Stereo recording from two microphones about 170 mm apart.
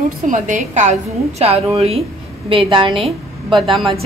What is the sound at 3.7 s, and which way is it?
Speech, centre (ahead or behind).